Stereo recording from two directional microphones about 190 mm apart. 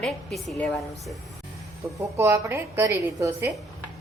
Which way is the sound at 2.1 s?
15° right (ahead or behind).